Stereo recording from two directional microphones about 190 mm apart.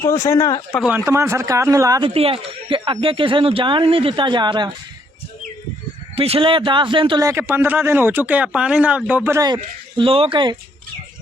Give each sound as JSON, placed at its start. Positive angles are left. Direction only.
{"t": 0.0, "sound": "speech", "side_deg": 15}
{"t": 0.8, "sound": "speech", "side_deg": -10}
{"t": 6.1, "sound": "a man's voice", "side_deg": -30}
{"t": 10.0, "sound": "speech", "side_deg": -30}